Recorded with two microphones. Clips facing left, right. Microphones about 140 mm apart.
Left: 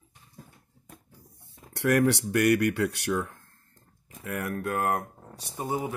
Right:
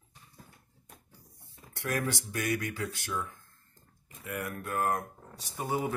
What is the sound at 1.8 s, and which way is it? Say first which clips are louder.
Speech: left 10 dB; 80° left.